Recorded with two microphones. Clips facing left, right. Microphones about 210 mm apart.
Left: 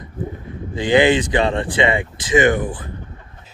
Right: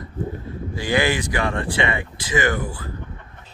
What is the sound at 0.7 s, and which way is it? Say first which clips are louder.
Speech: left 7 dB; 20° left (ahead or behind).